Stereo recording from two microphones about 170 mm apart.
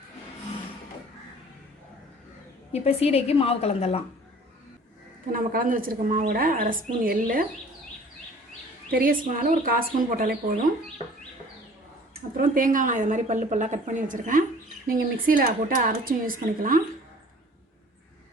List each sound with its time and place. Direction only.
2.7 s a woman's voice: 35° left (ahead or behind)
5.3 s a woman's voice: 55° right (ahead or behind)
8.9 s a woman's voice: 55° right (ahead or behind)
12.4 s a woman's voice: 55° right (ahead or behind)